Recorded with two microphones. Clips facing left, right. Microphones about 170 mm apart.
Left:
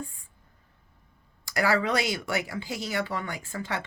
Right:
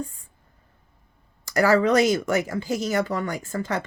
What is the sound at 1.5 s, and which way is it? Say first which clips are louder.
Speech: right 7 dB; 40° right (ahead or behind).